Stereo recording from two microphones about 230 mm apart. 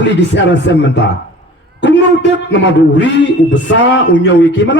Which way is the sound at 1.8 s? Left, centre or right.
Left.